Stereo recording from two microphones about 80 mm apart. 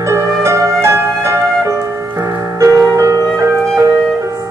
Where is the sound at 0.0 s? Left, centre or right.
Right.